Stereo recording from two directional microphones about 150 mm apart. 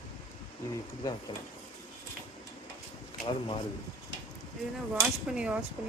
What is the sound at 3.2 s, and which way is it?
Speech, 35° left (ahead or behind).